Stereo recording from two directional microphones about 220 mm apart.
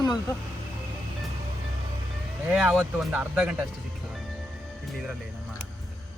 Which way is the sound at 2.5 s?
5° right (ahead or behind).